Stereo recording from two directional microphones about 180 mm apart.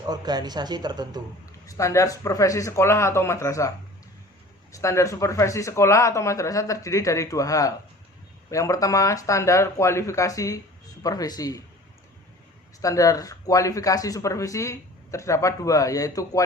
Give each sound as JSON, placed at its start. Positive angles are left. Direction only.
{"t": 0.0, "sound": "speech", "side_deg": -20}
{"t": 1.6, "sound": "speech", "side_deg": 15}
{"t": 4.7, "sound": "speech", "side_deg": 15}
{"t": 12.8, "sound": "speech", "side_deg": 20}